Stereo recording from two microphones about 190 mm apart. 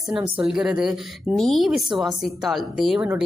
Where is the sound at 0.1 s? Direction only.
Centre (ahead or behind).